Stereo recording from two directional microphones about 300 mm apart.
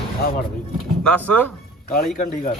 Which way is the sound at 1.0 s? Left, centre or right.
Centre.